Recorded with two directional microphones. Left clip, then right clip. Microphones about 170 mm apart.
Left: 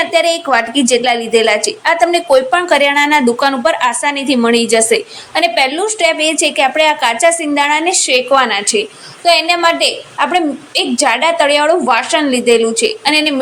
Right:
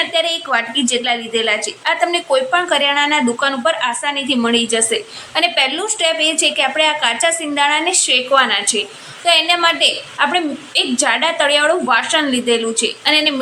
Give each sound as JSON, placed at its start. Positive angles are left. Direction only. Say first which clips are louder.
{"t": 0.0, "sound": "a woman's voice", "louder": "left 5 dB", "side_deg": 25}